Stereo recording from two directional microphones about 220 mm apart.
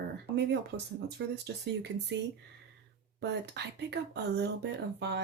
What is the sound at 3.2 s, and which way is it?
Speech, 50° right (ahead or behind).